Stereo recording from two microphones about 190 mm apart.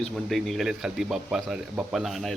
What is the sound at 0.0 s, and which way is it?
Speech, centre (ahead or behind).